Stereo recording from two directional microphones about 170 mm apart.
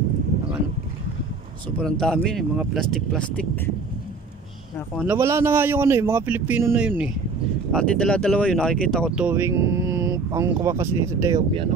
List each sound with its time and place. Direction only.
1.8 s speech: 5° left (ahead or behind)
5.0 s a man's voice: 15° right (ahead or behind)
7.7 s speech: 5° left (ahead or behind)
9.1 s speech: 10° right (ahead or behind)